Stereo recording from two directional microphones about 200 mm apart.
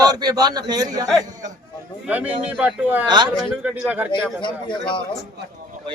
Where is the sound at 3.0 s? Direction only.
20° right (ahead or behind).